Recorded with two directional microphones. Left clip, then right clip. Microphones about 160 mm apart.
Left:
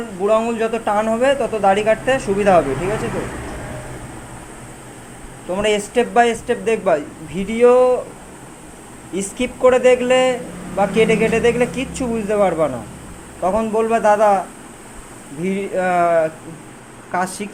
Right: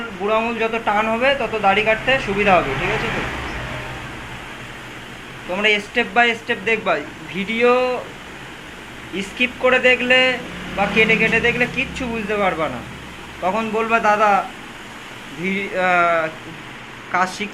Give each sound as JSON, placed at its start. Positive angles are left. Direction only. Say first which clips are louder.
{"t": 0.3, "sound": "speech", "louder": "left 2 dB", "side_deg": 70}
{"t": 5.5, "sound": "speech", "louder": "even", "side_deg": 55}
{"t": 9.1, "sound": "speech", "louder": "right 2 dB", "side_deg": 50}
{"t": 15.4, "sound": "speech", "louder": "even", "side_deg": 45}
{"t": 17.2, "sound": "speech", "louder": "right 2 dB", "side_deg": 55}